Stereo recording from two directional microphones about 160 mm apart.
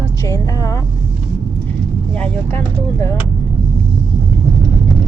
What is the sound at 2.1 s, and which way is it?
Speech, 10° left (ahead or behind).